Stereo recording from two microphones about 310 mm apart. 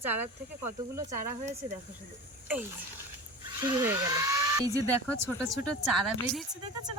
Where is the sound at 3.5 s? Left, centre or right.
Centre.